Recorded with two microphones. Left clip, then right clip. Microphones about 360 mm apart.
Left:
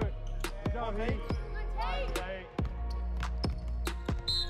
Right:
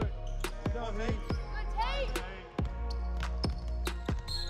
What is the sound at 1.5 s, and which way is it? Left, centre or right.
Music, right.